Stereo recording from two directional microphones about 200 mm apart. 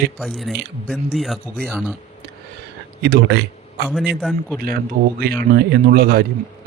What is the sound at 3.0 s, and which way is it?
Speech, 55° right (ahead or behind).